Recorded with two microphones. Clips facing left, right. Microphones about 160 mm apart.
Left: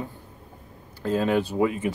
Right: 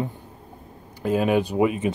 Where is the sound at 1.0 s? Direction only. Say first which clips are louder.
Right 2 dB; 15° right (ahead or behind).